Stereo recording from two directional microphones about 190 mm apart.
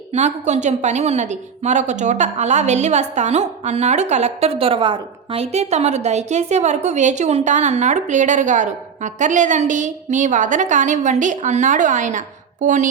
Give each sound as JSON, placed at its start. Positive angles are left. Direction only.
{"t": 0.1, "sound": "a woman's voice", "side_deg": -35}